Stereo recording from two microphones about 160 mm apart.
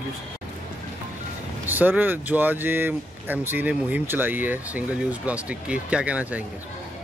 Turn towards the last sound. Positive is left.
turn(degrees=-10)  # may be behind; listen again after turning